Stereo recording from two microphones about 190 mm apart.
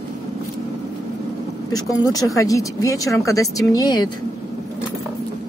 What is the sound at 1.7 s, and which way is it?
Speech, 20° left (ahead or behind).